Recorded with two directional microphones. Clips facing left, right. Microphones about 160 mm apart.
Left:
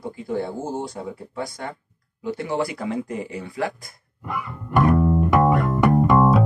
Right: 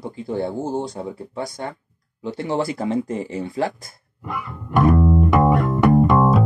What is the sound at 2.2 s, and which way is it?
Speech, 25° right (ahead or behind).